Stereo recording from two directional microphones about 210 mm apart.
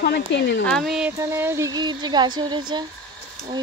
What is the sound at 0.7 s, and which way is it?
Speech, centre (ahead or behind).